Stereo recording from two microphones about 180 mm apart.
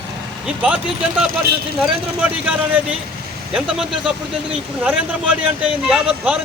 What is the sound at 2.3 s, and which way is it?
Speech, 10° right (ahead or behind).